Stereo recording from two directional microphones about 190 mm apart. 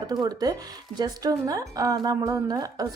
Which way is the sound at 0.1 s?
20° right (ahead or behind).